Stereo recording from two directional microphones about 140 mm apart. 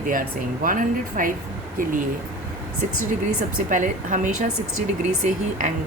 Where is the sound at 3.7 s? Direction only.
65° right (ahead or behind).